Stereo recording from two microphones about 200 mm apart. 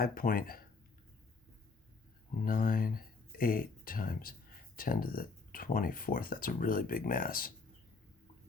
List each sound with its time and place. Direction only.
0.0 s speech: 45° left (ahead or behind)
2.4 s speech: 45° left (ahead or behind)